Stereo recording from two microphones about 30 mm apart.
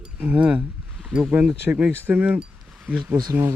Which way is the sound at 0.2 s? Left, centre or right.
Right.